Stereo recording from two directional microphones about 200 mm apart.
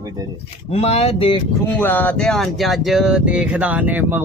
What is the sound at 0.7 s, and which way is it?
Speech, 30° left (ahead or behind).